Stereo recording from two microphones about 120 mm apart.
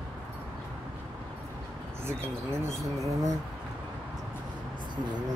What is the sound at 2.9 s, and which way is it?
Speech, 25° right (ahead or behind).